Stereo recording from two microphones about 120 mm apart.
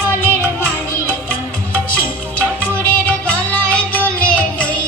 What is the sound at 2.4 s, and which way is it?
Music, 15° left (ahead or behind).